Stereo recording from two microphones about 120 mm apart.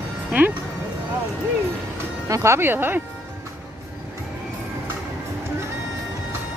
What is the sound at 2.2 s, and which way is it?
Speech, 25° right (ahead or behind).